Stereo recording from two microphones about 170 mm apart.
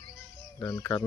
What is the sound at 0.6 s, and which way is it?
Cricket, 20° left (ahead or behind).